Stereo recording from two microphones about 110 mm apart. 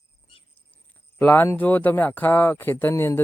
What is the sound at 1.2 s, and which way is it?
Speech, 20° left (ahead or behind).